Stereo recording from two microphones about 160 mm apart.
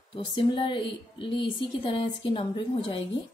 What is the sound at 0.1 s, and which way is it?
Speech, 30° left (ahead or behind).